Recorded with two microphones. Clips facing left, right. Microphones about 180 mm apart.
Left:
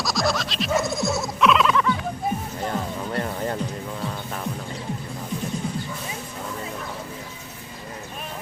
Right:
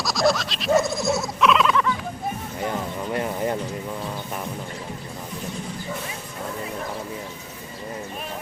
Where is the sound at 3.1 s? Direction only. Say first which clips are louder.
Right 3 dB; 15° right (ahead or behind).